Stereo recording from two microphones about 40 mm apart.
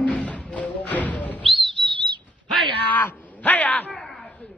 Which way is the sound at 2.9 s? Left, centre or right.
Left.